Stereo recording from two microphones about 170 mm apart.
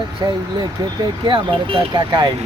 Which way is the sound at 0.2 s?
20° right (ahead or behind).